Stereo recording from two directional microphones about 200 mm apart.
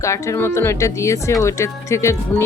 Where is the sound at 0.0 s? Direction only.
15° left (ahead or behind).